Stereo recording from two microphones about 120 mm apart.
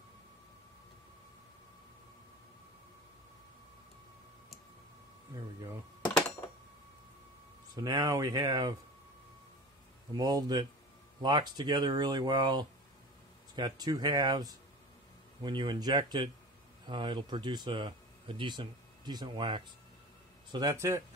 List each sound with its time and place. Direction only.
7.7 s speech: 30° right (ahead or behind)
10.1 s speech: 35° right (ahead or behind)
20.7 s speech: 20° right (ahead or behind)